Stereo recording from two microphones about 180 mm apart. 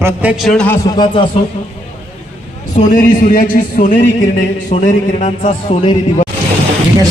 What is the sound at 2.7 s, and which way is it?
Speech, 45° left (ahead or behind).